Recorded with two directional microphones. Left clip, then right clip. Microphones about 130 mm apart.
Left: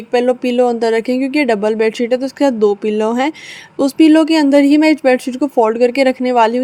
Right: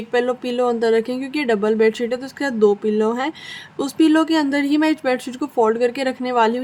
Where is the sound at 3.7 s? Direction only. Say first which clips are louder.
Left 6 dB; 35° left (ahead or behind).